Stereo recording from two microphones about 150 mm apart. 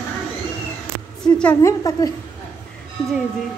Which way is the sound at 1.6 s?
20° left (ahead or behind).